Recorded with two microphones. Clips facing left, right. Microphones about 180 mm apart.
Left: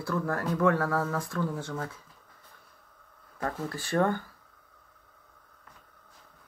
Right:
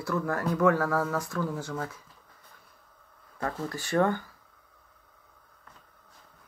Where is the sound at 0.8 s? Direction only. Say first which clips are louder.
Right 1 dB; 25° left (ahead or behind).